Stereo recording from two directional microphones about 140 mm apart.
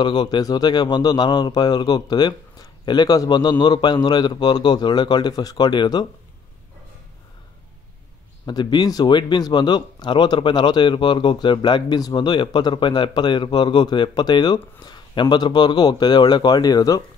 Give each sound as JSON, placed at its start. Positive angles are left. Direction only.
{"t": 0.0, "sound": "speech", "side_deg": 30}
{"t": 8.5, "sound": "speech", "side_deg": 30}